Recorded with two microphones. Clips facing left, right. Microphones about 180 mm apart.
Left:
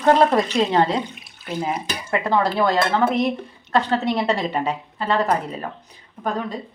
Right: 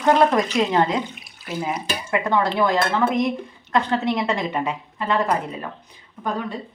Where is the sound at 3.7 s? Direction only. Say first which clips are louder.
Left 1 dB; 35° left (ahead or behind).